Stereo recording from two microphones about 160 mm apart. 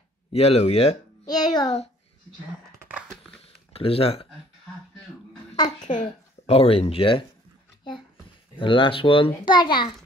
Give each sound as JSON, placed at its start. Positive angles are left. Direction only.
{"t": 0.3, "sound": "a child's voice", "side_deg": 40}
{"t": 1.2, "sound": "child singing", "side_deg": 25}
{"t": 3.4, "sound": "a sound", "side_deg": 35}
{"t": 5.8, "sound": "speech", "side_deg": 50}
{"t": 8.5, "sound": "a child's voice", "side_deg": 30}